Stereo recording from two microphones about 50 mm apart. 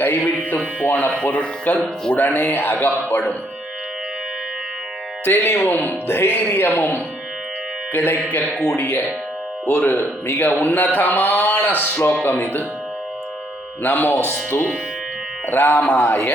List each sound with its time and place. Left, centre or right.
0.9 s a man's voice: left
5.2 s a man's voice: left
13.8 s speech: left
15.4 s speech: left